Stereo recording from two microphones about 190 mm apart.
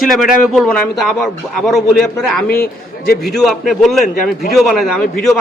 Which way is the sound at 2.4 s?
50° left (ahead or behind).